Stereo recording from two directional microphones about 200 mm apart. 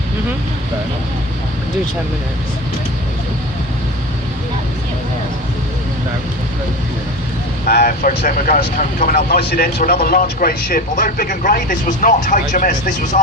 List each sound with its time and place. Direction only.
7.7 s a man's voice: 50° left (ahead or behind)